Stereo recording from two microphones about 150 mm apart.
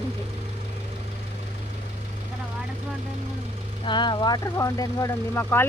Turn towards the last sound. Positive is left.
turn(degrees=15)  # may be behind; listen again after turning